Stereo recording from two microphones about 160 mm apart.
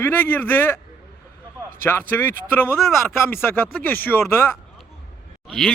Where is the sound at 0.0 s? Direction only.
10° left (ahead or behind).